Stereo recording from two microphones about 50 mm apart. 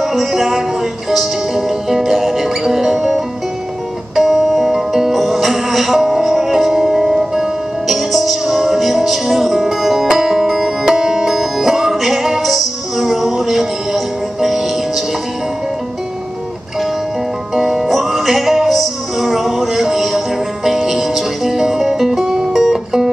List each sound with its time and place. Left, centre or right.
0.0 s music: centre
17.6 s music: centre